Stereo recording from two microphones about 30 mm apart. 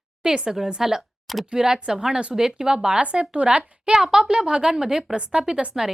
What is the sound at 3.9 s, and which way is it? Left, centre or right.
A woman's voice, centre.